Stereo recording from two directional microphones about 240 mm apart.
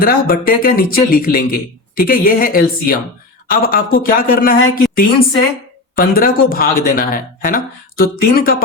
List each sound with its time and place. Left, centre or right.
0.0 s speech: left